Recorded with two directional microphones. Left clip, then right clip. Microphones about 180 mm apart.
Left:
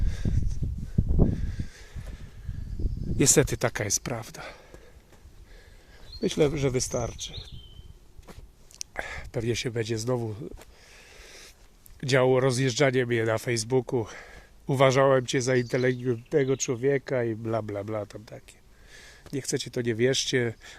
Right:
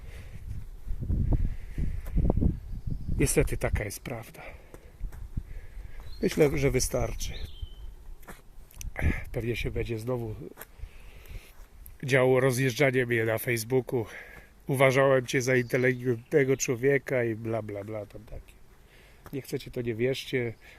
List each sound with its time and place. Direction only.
3.2 s speech: 35° left (ahead or behind)
6.1 s speech: 5° right (ahead or behind)
8.9 s a sound: 15° left (ahead or behind)
9.5 s speech: 30° left (ahead or behind)
10.9 s a sound: 35° left (ahead or behind)
11.9 s speech: 10° left (ahead or behind)
17.7 s speech: 35° left (ahead or behind)
19.3 s speech: 30° left (ahead or behind)